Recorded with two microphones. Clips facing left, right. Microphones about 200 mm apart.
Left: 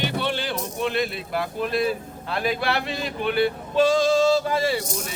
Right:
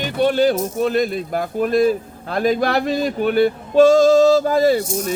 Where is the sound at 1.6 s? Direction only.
45° right (ahead or behind).